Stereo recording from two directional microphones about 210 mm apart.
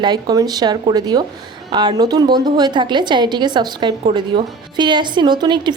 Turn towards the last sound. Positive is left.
turn(degrees=-20)  # may be behind; listen again after turning